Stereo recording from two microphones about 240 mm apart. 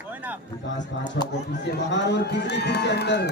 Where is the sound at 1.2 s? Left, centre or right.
Left.